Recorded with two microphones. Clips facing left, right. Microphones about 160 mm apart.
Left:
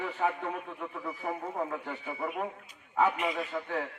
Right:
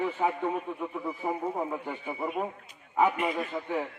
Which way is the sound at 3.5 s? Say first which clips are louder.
Right 1 dB; 20° right (ahead or behind).